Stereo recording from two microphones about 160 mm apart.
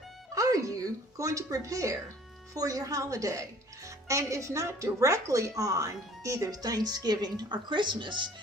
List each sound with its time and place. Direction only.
0.3 s music: 20° right (ahead or behind)
2.6 s speech: 20° right (ahead or behind)